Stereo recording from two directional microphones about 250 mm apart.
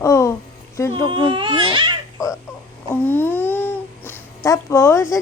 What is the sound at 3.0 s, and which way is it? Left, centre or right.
Babbling, centre.